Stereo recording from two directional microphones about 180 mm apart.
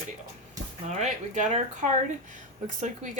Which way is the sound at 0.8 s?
40° right (ahead or behind).